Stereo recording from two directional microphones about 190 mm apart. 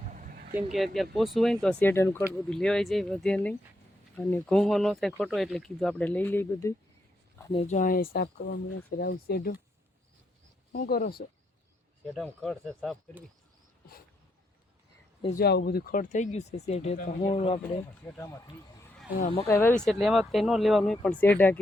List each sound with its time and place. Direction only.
0.0 s a sound: 45° right (ahead or behind)
1.1 s speech: centre (ahead or behind)
7.5 s speech: 35° left (ahead or behind); by 9.6 s 50° left (ahead or behind)
10.7 s speech: 55° left (ahead or behind)
12.1 s speech: 5° left (ahead or behind)
15.3 s speech: 55° left (ahead or behind); by 17.6 s 35° left (ahead or behind)
18.0 s speech: 15° left (ahead or behind)
19.2 s speech: 30° left (ahead or behind)
19.5 s speech: 15° left (ahead or behind)